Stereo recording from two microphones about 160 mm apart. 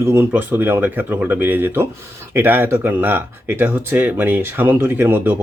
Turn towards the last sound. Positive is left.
turn(degrees=-10)  # may be behind; listen again after turning